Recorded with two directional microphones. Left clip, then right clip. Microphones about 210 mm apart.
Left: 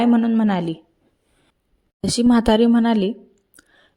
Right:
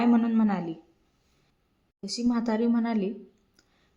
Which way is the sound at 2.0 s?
45° left (ahead or behind).